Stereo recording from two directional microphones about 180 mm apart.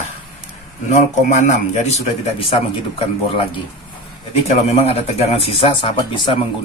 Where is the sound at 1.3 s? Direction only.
40° left (ahead or behind).